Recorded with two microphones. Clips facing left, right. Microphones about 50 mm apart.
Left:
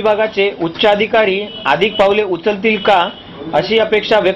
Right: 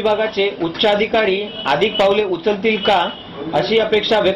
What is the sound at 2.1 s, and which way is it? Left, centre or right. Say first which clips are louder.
Speech: left 2 dB; left.